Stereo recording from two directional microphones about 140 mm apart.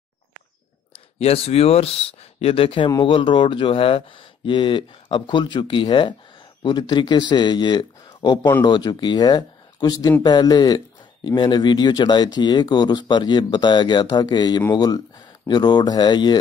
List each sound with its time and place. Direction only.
1.2 s speech: 45° left (ahead or behind)